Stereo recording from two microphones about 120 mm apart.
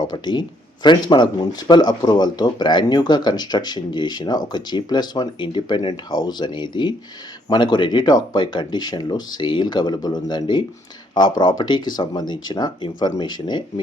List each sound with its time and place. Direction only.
0.1 s speech: 40° left (ahead or behind)